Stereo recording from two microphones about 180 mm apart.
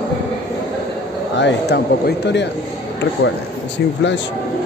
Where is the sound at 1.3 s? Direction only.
75° left (ahead or behind).